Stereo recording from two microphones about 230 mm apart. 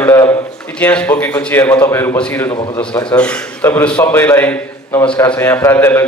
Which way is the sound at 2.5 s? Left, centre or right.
Centre.